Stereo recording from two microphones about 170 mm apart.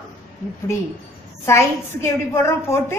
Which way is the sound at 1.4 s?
15° left (ahead or behind).